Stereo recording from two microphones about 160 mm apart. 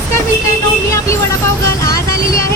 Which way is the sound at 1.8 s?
20° left (ahead or behind).